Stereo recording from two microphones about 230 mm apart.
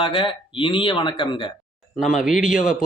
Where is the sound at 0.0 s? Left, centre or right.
Left.